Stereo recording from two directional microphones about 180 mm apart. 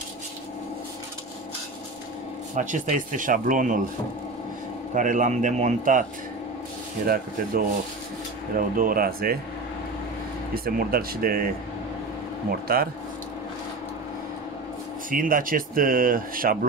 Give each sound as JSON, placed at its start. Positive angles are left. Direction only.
{"t": 2.5, "sound": "speech", "side_deg": -45}
{"t": 4.9, "sound": "speech", "side_deg": -45}
{"t": 8.5, "sound": "speech", "side_deg": -50}
{"t": 10.5, "sound": "speech", "side_deg": -55}
{"t": 15.0, "sound": "speech", "side_deg": -50}